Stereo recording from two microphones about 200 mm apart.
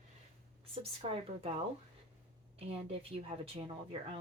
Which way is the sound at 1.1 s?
30° right (ahead or behind).